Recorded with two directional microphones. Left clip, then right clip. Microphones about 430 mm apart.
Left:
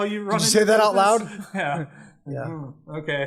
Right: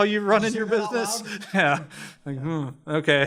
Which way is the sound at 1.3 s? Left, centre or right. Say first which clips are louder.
Right 5 dB; right.